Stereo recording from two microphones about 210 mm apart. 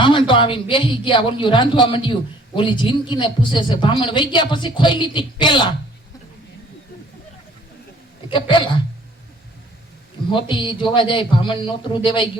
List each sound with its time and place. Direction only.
0.0 s a man's voice: 25° left (ahead or behind)
8.3 s a man's voice: 20° left (ahead or behind)
10.5 s a man's voice: 25° left (ahead or behind)